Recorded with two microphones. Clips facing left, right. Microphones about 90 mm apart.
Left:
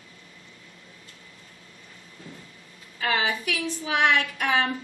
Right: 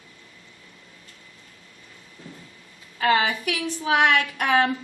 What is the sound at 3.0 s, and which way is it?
A woman's voice, 50° right (ahead or behind).